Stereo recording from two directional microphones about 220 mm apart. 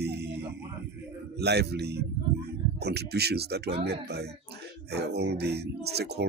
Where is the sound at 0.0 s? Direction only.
50° right (ahead or behind).